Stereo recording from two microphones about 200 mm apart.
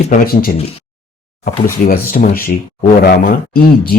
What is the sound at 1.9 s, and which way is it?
A man's voice, 45° left (ahead or behind).